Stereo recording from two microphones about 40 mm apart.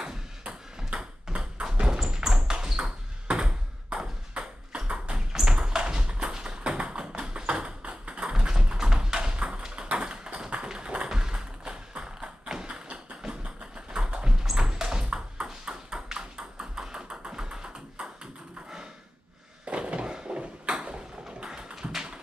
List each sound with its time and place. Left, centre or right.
0.0 s ping: centre
5.3 s tap: centre
8.2 s tap: centre
13.9 s music: right
14.4 s ping: centre
19.7 s a sound: right